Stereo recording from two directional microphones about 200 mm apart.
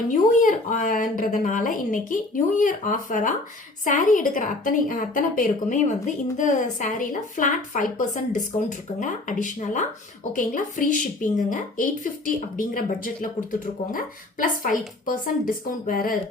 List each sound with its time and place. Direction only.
0.1 s a woman's voice: 40° left (ahead or behind)